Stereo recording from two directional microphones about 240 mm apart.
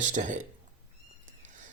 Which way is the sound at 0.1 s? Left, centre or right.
Right.